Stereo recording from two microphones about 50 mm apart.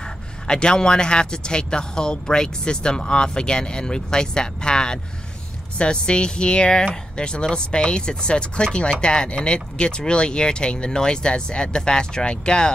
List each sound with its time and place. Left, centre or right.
0.5 s speech: centre